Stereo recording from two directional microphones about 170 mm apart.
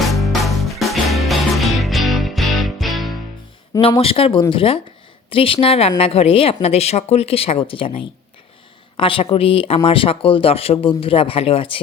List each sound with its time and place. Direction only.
0.0 s music: centre (ahead or behind)
4.0 s speech: 35° left (ahead or behind)